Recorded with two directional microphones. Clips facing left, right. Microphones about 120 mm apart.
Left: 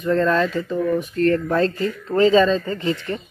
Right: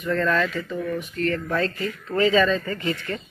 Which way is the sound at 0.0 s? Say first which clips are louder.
Left 4 dB; 25° left (ahead or behind).